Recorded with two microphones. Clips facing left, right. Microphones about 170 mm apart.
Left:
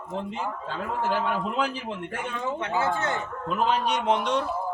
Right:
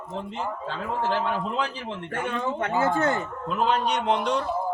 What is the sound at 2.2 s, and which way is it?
Speech, 50° right (ahead or behind).